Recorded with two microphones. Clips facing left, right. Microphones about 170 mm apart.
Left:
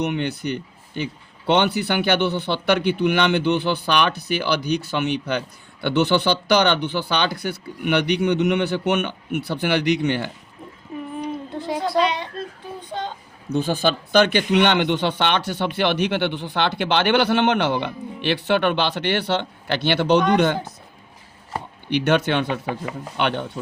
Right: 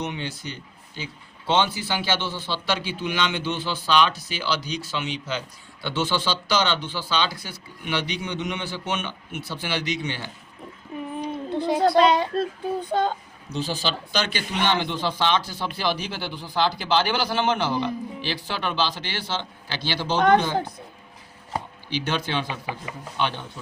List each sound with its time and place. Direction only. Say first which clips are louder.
0.0 s a man's voice: left 7 dB; 60° left (ahead or behind)
11.5 s a sound: right 6 dB; centre (ahead or behind)
12.9 s a child's voice: right 6 dB; 50° right (ahead or behind)
13.5 s a man's voice: left 7 dB; 55° left (ahead or behind)
21.8 s a man's voice: left 10 dB; 65° left (ahead or behind)